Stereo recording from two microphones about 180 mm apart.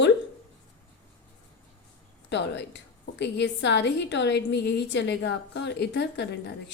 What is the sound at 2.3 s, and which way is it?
A woman's voice, 75° left (ahead or behind).